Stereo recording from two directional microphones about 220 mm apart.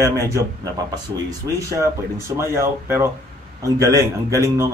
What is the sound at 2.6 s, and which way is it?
Speech, 10° right (ahead or behind).